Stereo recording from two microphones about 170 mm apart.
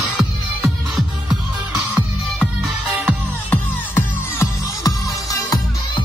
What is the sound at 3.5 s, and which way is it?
Music, 15° left (ahead or behind).